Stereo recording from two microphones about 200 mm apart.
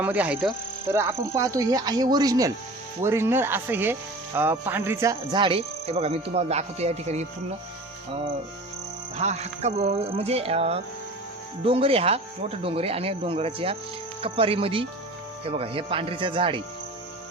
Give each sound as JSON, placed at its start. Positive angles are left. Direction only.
{"t": 0.0, "sound": "speech", "side_deg": -5}
{"t": 9.1, "sound": "music", "side_deg": -35}
{"t": 11.6, "sound": "speech", "side_deg": -30}